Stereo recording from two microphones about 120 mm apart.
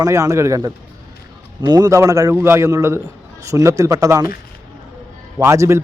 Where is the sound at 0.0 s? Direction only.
25° right (ahead or behind).